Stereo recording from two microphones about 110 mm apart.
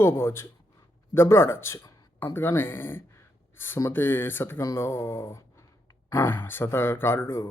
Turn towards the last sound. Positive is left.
turn(degrees=25)  # may be behind; listen again after turning